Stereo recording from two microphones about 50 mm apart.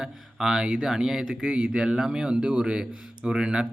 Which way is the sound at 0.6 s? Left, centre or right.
Right.